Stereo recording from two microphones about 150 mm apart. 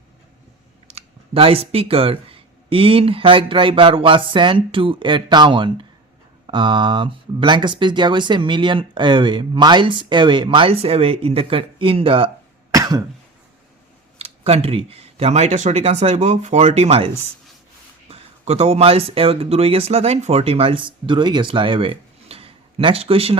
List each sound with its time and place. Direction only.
0.9 s speech: 40° right (ahead or behind)
12.7 s throat clearing: 25° right (ahead or behind)
14.2 s speech: 45° right (ahead or behind)
18.1 s speech: 45° right (ahead or behind)